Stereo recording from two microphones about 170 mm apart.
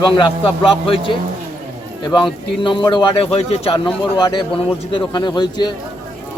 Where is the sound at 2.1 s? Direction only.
30° left (ahead or behind).